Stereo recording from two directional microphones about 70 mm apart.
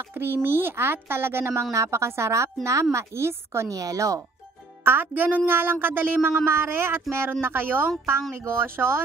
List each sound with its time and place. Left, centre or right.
0.1 s speech: right
4.8 s speech: right